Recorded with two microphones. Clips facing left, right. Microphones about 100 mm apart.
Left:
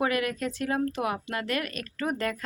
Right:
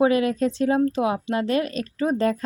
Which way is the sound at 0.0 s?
25° right (ahead or behind).